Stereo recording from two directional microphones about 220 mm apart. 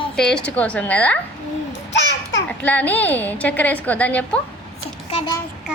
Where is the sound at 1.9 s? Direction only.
55° left (ahead or behind).